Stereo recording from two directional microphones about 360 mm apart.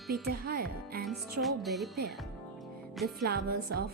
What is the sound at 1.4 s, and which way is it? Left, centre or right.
Speech, centre.